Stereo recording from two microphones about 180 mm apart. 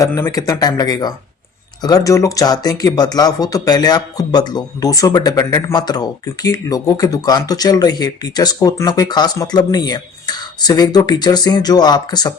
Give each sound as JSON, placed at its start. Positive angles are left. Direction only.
{"t": 0.0, "sound": "speech", "side_deg": 15}